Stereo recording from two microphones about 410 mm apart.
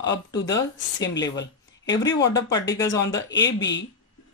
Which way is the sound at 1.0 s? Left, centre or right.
Left.